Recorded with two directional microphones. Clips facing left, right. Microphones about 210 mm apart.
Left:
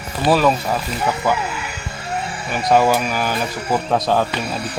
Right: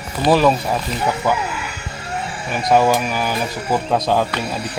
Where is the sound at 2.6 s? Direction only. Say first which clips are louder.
Even; 5° right (ahead or behind).